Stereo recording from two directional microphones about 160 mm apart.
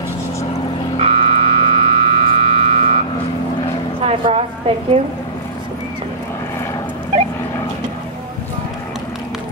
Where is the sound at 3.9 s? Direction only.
40° right (ahead or behind).